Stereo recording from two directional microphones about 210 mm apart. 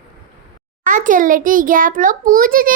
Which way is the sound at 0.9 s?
40° right (ahead or behind).